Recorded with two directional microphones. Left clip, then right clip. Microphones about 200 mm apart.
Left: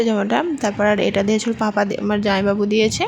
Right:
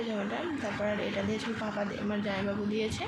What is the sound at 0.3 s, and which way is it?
Speech, 55° left (ahead or behind).